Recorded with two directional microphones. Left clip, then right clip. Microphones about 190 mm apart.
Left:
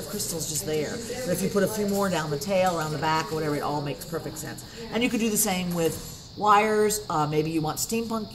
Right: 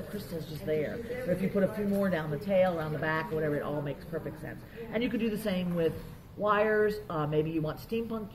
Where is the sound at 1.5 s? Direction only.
30° left (ahead or behind).